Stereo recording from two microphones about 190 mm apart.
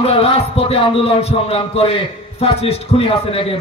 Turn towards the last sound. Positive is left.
turn(degrees=30)  # may be behind; listen again after turning